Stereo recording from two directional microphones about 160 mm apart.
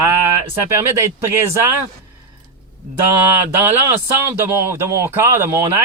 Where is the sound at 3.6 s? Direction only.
15° right (ahead or behind).